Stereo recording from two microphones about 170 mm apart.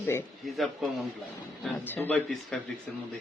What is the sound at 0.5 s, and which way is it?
Speech, centre (ahead or behind).